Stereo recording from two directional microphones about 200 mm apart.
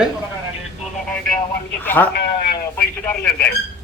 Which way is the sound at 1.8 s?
10° left (ahead or behind).